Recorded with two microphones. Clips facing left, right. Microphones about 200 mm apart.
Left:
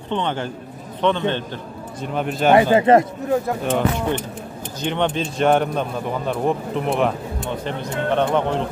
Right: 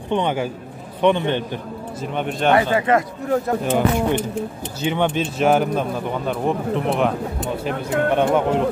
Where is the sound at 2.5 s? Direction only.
30° left (ahead or behind).